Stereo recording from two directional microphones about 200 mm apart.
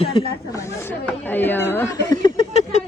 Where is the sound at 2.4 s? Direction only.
30° left (ahead or behind).